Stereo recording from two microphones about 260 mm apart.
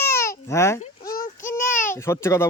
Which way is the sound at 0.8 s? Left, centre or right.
Left.